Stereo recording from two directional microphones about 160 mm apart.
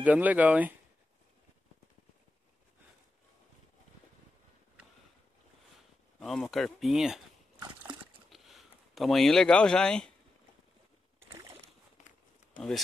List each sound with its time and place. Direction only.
0.0 s speech: 10° right (ahead or behind)
6.1 s speech: centre (ahead or behind)
8.3 s a sound: centre (ahead or behind)
11.1 s boat: 15° right (ahead or behind)
12.5 s speech: centre (ahead or behind)